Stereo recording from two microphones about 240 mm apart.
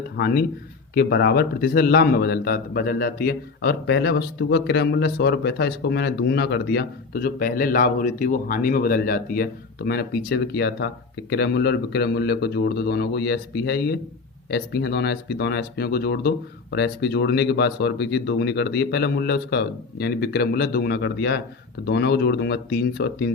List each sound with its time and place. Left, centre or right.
0.2 s a man's voice: left